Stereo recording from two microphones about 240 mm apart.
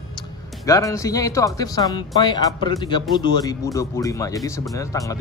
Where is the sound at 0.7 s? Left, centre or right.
Centre.